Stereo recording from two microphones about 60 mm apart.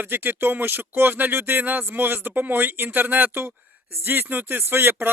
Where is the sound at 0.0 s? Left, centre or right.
Right.